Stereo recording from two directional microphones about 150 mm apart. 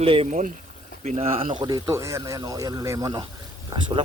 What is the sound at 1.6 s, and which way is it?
Speech, 25° right (ahead or behind).